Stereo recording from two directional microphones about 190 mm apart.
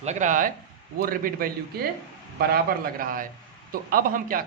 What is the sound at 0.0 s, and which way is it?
A man's voice, 40° right (ahead or behind).